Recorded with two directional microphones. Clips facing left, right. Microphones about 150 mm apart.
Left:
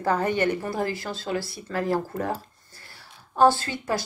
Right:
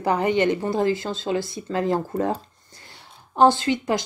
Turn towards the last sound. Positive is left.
turn(degrees=-15)  # may be behind; listen again after turning